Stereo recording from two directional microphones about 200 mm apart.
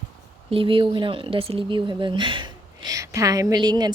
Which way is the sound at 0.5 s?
25° right (ahead or behind).